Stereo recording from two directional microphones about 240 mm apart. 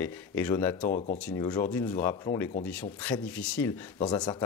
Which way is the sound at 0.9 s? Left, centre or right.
Left.